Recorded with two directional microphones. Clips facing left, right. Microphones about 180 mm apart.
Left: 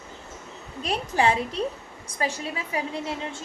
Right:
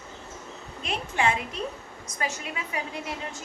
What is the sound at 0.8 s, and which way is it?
A woman's voice, 35° left (ahead or behind).